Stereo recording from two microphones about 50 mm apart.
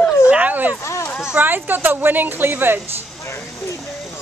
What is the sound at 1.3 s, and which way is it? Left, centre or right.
A woman's voice, right.